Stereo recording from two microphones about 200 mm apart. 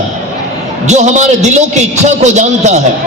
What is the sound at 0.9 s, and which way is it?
A man's voice, 35° right (ahead or behind).